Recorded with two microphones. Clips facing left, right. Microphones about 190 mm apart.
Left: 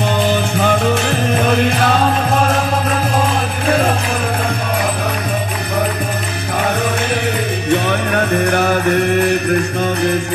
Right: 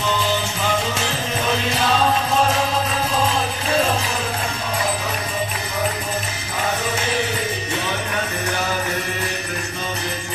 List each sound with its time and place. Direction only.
0.0 s music: 55° left (ahead or behind)
3.6 s music: 55° left (ahead or behind)
7.8 s music: 60° left (ahead or behind)